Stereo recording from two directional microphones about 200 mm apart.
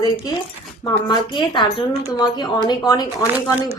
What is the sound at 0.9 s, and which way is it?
A woman's voice, 20° left (ahead or behind).